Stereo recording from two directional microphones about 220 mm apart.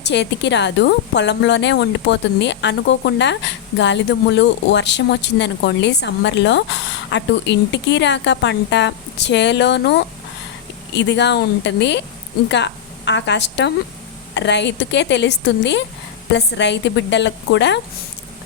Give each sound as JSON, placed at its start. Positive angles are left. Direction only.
{"t": 0.0, "sound": "a woman's voice", "side_deg": 50}